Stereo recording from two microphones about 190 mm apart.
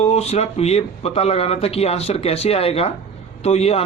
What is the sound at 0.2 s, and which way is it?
Speech, 35° left (ahead or behind).